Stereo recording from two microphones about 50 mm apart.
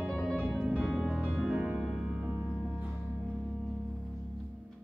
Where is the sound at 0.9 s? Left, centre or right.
Centre.